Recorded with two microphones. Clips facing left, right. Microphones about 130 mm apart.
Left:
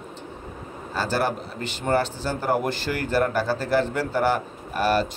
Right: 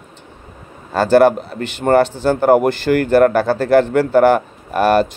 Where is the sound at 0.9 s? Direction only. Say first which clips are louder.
Right 14 dB; 65° right (ahead or behind).